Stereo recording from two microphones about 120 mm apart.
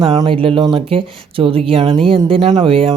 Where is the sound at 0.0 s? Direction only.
40° right (ahead or behind).